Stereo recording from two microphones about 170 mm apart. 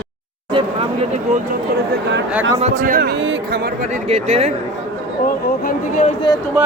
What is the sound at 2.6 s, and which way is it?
A man's voice, 45° right (ahead or behind).